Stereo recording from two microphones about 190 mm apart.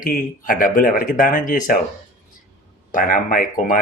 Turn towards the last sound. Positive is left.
turn(degrees=45)  # may be behind; listen again after turning